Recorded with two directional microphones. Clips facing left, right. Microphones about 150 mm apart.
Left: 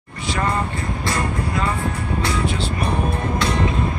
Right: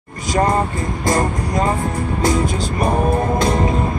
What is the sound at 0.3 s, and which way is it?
Speech, 40° right (ahead or behind).